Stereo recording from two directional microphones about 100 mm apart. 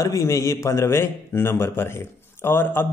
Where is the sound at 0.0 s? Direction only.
30° left (ahead or behind).